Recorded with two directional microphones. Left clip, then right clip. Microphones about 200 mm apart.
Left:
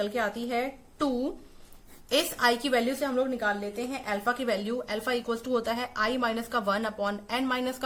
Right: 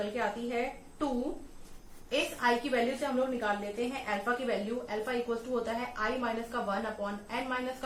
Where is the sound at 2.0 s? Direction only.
60° left (ahead or behind).